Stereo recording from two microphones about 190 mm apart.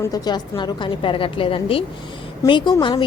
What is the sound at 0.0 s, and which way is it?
Speech, 20° left (ahead or behind).